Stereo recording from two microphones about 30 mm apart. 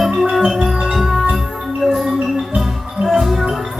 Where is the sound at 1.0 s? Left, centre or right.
Centre.